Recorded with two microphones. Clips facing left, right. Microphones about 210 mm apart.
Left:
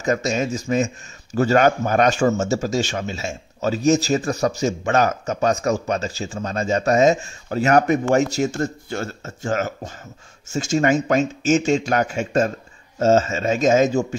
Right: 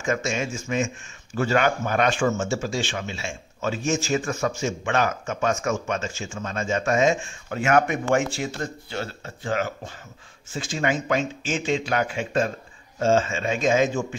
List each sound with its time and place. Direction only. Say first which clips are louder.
0.0 s a man's voice: left 5 dB; 40° left (ahead or behind)